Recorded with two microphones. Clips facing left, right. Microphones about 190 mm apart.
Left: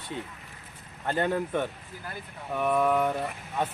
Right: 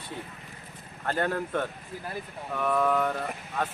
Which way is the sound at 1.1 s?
15° left (ahead or behind).